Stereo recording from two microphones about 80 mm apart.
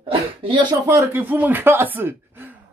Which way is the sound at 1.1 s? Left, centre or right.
Right.